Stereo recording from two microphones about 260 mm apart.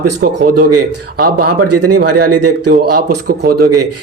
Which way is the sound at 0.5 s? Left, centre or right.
Right.